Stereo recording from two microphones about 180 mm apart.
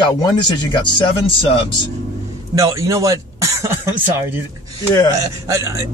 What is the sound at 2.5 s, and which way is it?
Speech, 15° right (ahead or behind).